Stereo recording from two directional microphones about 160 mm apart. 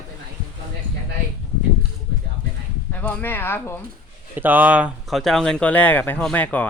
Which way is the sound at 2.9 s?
10° left (ahead or behind).